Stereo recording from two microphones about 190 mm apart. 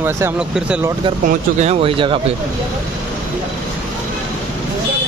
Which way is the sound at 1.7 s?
30° right (ahead or behind).